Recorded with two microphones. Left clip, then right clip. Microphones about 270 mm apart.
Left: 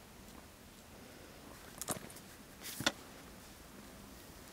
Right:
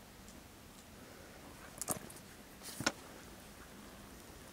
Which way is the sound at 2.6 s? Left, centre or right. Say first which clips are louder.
Left 2 dB; centre.